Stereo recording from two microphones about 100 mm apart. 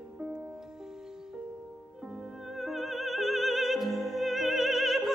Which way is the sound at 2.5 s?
Centre (ahead or behind).